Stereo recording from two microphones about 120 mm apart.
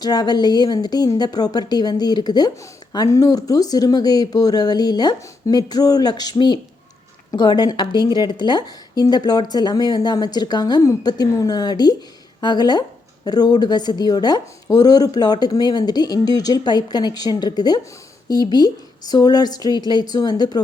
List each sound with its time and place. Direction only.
0.0 s a woman's voice: 35° left (ahead or behind)